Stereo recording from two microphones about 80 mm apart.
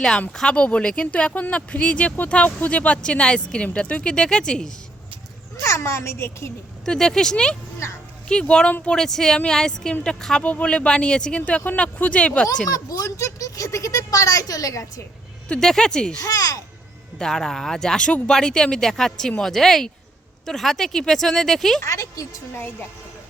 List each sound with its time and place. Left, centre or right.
0.3 s speech: centre
5.6 s speech: left
6.8 s speech: centre
12.7 s speech: left
15.4 s speech: centre
16.2 s speech: left
17.2 s speech: centre
21.8 s speech: left